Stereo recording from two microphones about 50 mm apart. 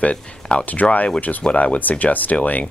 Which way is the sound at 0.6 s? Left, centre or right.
Left.